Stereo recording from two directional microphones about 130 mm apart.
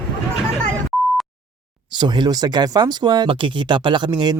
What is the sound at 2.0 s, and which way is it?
Speech, 35° right (ahead or behind).